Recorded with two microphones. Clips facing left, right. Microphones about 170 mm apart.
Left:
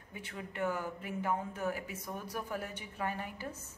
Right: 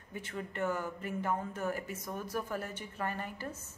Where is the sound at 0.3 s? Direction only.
10° left (ahead or behind).